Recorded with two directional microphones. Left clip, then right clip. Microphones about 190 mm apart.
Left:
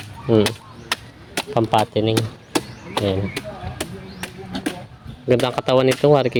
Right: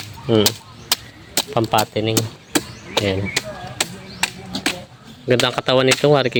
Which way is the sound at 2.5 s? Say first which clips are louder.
Right 2 dB; 40° right (ahead or behind).